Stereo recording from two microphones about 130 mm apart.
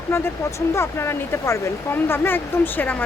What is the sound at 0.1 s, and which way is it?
Speech, 20° left (ahead or behind).